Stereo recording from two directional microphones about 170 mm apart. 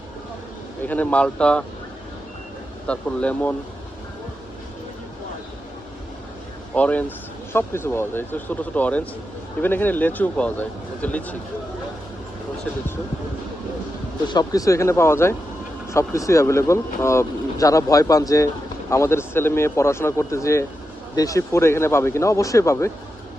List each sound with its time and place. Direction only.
0.9 s speech: 10° left (ahead or behind)
2.8 s speech: 5° left (ahead or behind)
6.7 s speech: 10° left (ahead or behind)
14.3 s speech: 20° left (ahead or behind)